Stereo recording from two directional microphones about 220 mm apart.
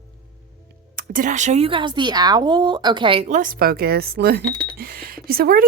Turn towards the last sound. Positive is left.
turn(degrees=-45)  # may be behind; listen again after turning